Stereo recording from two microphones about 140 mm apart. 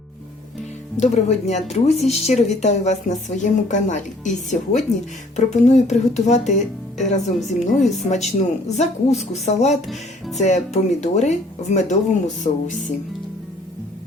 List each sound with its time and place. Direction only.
0.9 s a woman's voice: 55° left (ahead or behind)
9.8 s music: centre (ahead or behind)
10.3 s speech: 55° left (ahead or behind)